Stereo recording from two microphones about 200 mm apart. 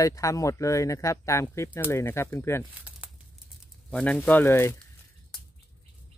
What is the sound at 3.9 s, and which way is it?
Speech, 5° left (ahead or behind).